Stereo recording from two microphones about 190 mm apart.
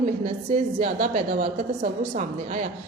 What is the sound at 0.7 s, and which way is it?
Speech, 35° right (ahead or behind).